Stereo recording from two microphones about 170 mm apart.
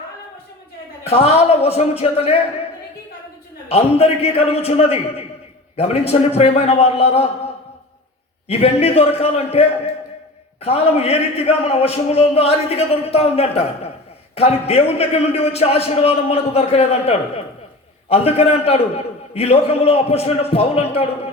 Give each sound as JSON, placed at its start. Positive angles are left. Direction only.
{"t": 1.0, "sound": "a man's voice", "side_deg": 35}
{"t": 3.7, "sound": "a man's voice", "side_deg": 35}
{"t": 8.4, "sound": "a man's voice", "side_deg": 35}